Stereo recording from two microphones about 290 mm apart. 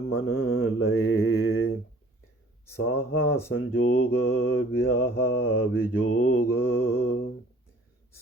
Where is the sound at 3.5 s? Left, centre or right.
Left.